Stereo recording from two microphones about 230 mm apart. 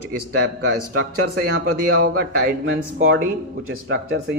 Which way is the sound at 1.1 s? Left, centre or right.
Right.